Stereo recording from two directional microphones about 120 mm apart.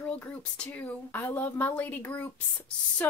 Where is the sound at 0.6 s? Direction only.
15° left (ahead or behind).